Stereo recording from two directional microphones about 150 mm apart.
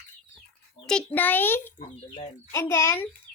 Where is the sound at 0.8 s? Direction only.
5° left (ahead or behind).